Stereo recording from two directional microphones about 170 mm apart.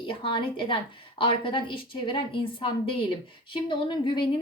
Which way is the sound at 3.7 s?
30° left (ahead or behind).